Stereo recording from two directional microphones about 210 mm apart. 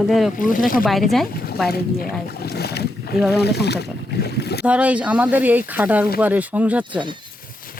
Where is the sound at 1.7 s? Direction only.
50° left (ahead or behind).